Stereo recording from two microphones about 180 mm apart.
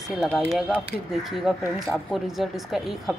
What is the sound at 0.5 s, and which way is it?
Speech, centre (ahead or behind).